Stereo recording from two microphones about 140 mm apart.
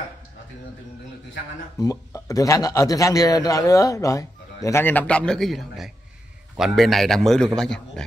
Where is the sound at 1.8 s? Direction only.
25° left (ahead or behind).